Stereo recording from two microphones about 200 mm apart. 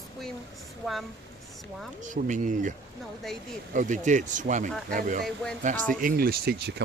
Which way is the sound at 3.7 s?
40° right (ahead or behind).